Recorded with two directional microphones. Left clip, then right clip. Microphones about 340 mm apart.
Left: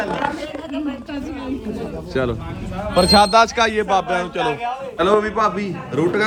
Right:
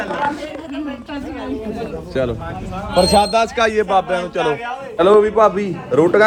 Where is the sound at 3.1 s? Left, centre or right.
Centre.